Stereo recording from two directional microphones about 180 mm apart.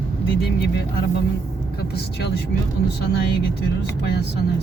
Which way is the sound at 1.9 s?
65° left (ahead or behind).